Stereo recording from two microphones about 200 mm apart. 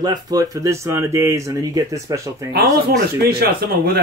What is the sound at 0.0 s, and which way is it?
Speech, 20° right (ahead or behind).